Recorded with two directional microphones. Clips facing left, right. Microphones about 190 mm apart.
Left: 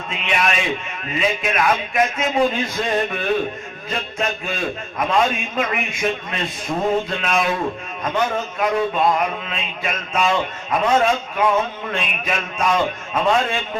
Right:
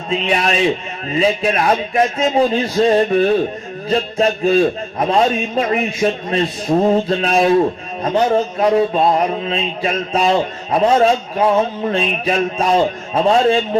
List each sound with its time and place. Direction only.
0.1 s mantra: 35° right (ahead or behind)
6.7 s a sound: 30° right (ahead or behind)
7.1 s mantra: 35° right (ahead or behind)